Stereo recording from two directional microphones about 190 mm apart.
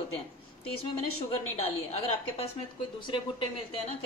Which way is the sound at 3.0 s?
25° left (ahead or behind).